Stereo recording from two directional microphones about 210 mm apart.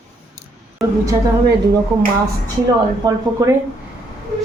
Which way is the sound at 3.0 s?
15° right (ahead or behind).